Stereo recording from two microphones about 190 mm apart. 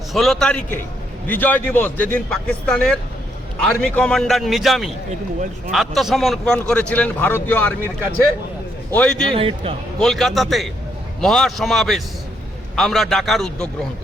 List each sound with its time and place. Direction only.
0.1 s a man's voice: centre (ahead or behind)
8.9 s a man's voice: 5° left (ahead or behind)
9.3 s speech: 30° right (ahead or behind)
10.0 s a man's voice: centre (ahead or behind)